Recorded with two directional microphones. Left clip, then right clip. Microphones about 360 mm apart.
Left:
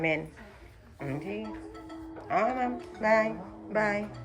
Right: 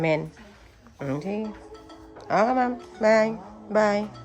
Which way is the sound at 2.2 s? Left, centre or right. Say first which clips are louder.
Right 6 dB; centre.